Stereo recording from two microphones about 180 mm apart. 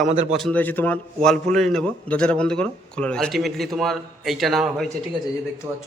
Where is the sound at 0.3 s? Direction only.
Centre (ahead or behind).